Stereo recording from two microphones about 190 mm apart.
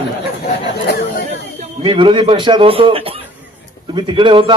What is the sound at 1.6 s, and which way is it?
Speech, 25° right (ahead or behind).